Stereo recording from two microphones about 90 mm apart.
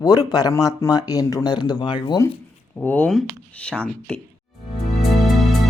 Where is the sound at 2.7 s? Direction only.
10° left (ahead or behind).